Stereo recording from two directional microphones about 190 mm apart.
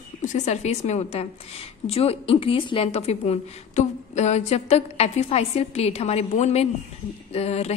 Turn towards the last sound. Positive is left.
turn(degrees=35)  # may be behind; listen again after turning